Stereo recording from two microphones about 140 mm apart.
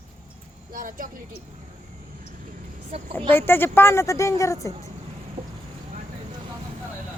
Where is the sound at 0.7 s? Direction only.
80° right.